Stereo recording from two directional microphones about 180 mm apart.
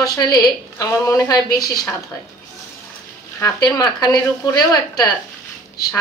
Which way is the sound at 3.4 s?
20° left (ahead or behind).